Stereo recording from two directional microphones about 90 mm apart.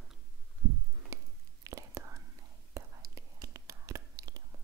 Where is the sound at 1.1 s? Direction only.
35° right (ahead or behind).